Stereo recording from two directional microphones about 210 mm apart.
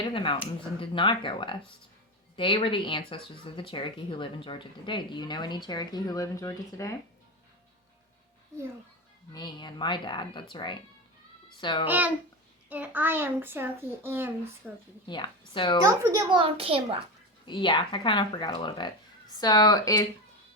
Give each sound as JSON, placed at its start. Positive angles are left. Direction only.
{"t": 0.0, "sound": "speech", "side_deg": 25}
{"t": 9.3, "sound": "speech", "side_deg": 20}
{"t": 11.9, "sound": "a child's voice", "side_deg": -10}
{"t": 15.0, "sound": "speech", "side_deg": 20}
{"t": 15.9, "sound": "a child's voice", "side_deg": -15}
{"t": 17.4, "sound": "speech", "side_deg": 25}